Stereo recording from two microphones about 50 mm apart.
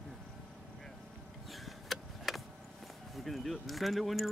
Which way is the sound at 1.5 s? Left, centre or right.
Centre.